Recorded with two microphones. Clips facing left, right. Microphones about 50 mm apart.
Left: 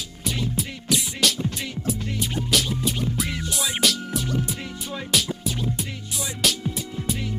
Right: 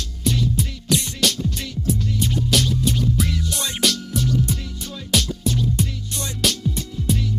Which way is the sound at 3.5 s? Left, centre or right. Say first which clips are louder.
Left 1 dB; centre.